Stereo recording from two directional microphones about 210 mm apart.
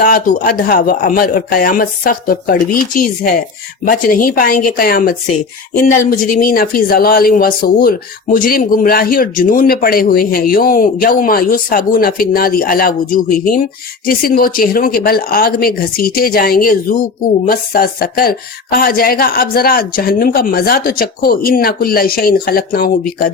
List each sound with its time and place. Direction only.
0.0 s speech: 40° left (ahead or behind)